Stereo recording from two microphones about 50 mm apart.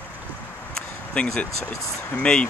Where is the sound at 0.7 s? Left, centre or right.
Centre.